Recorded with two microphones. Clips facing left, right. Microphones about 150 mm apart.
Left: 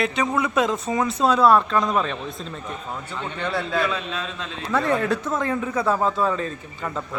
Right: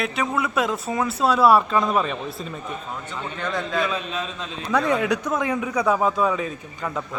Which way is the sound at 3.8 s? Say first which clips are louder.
Even; 15° right (ahead or behind).